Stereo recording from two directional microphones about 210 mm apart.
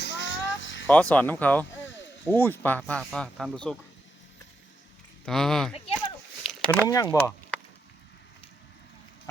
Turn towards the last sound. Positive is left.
turn(degrees=5)  # may be behind; listen again after turning